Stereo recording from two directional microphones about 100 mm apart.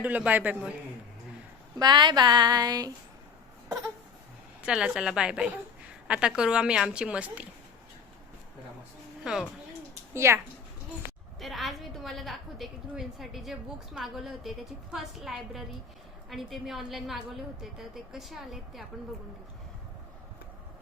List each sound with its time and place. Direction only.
0.0 s a woman's voice: 15° right (ahead or behind)
1.8 s speech: 50° right (ahead or behind)
4.6 s a woman's voice: 10° right (ahead or behind)
9.2 s a woman's voice: 5° right (ahead or behind)
10.2 s speech: 25° right (ahead or behind)
11.3 s a woman's voice: centre (ahead or behind)